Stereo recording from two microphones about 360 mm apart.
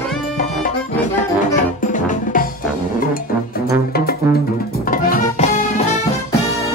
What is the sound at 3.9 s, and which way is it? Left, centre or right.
Music, left.